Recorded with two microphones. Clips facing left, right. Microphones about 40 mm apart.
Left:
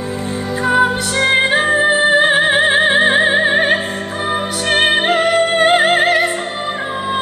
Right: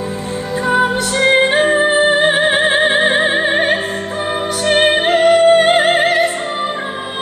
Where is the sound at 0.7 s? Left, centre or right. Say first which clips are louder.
Left 1 dB; centre.